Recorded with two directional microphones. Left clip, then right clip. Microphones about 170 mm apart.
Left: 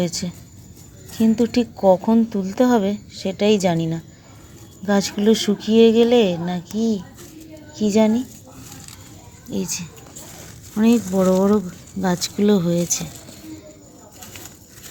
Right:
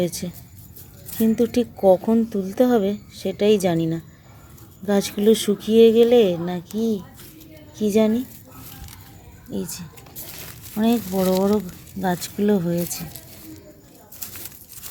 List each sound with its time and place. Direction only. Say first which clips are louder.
0.0 s a woman's voice: even; 15° right (ahead or behind)
9.5 s speech: left 4 dB; 5° right (ahead or behind)